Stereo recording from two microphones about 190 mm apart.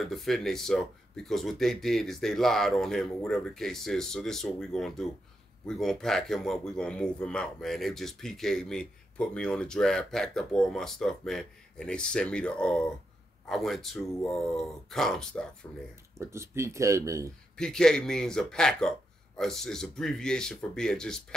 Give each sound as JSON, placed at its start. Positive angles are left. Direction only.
{"t": 0.0, "sound": "a man's voice", "side_deg": 0}
{"t": 16.2, "sound": "speech", "side_deg": -15}
{"t": 17.6, "sound": "a man's voice", "side_deg": 5}